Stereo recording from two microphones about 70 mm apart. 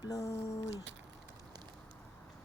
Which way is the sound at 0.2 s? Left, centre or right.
Left.